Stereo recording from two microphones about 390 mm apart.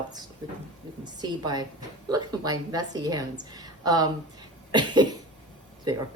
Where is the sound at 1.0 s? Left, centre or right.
Centre.